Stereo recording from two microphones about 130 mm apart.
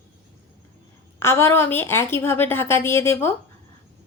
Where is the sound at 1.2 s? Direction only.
20° left (ahead or behind).